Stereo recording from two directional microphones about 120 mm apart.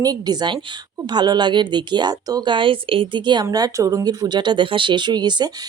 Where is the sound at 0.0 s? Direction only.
35° right (ahead or behind).